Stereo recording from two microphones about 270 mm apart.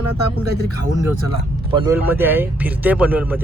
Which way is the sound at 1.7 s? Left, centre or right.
Centre.